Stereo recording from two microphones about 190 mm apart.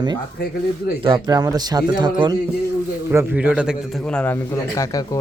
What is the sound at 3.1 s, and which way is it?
A man's voice, 10° right (ahead or behind).